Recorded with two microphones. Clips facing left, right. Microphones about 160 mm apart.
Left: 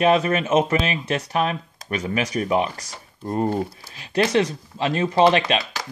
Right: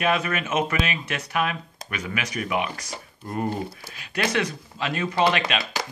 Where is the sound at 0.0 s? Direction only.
30° left (ahead or behind).